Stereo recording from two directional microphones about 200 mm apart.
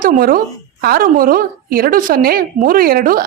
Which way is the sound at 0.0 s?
45° right (ahead or behind).